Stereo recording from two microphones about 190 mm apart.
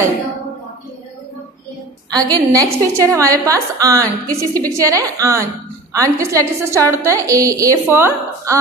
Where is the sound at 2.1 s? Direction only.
20° right (ahead or behind).